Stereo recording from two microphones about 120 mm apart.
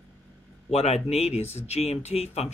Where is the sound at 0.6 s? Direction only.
60° left (ahead or behind).